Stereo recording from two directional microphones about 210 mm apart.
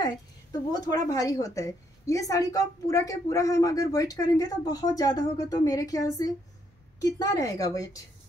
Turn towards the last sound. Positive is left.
turn(degrees=15)  # may be behind; listen again after turning